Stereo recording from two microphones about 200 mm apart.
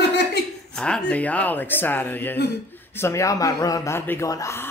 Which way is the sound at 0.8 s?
5° left (ahead or behind).